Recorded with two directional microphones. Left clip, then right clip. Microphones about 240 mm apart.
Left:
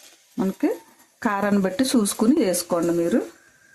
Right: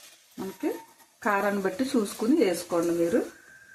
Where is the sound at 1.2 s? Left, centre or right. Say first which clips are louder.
Left 3 dB; left.